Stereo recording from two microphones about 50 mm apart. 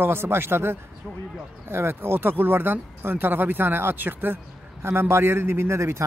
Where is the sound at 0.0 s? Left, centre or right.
Right.